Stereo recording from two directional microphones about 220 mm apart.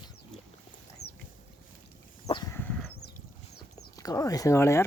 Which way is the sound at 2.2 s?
20° left (ahead or behind).